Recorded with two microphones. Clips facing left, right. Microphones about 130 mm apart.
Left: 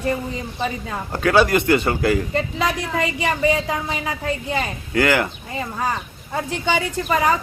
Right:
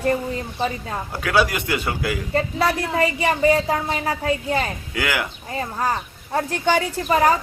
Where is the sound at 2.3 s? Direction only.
40° right (ahead or behind).